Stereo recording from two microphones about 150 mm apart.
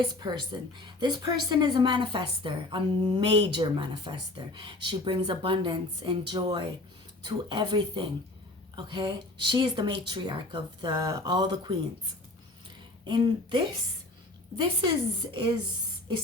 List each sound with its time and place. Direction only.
0.0 s a woman's voice: 30° right (ahead or behind)
13.1 s a woman's voice: 30° right (ahead or behind)